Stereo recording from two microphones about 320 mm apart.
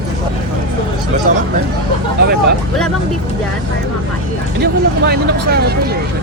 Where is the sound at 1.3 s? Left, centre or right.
Right.